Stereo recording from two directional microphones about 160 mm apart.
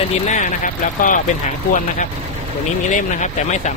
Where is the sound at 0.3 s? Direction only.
50° left (ahead or behind).